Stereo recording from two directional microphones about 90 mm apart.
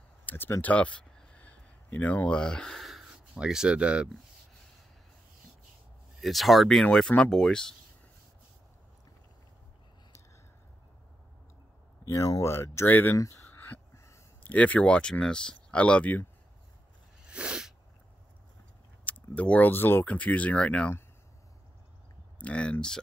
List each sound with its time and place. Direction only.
0.2 s a sound: 20° left (ahead or behind); by 4.1 s 10° right (ahead or behind)
6.2 s speech: centre (ahead or behind)
12.1 s speech: 40° left (ahead or behind); by 13.2 s 20° left (ahead or behind)
13.2 s a sound: 30° left (ahead or behind)
14.4 s speech: 15° left (ahead or behind)
17.2 s sneeze: 10° right (ahead or behind)
19.0 s speech: 15° left (ahead or behind)
22.4 s speech: 15° left (ahead or behind)